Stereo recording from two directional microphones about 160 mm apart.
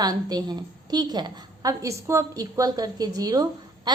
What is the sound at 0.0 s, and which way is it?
A woman's voice, 25° right (ahead or behind).